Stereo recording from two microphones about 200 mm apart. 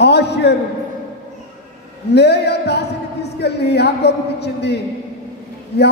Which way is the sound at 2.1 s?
55° left (ahead or behind).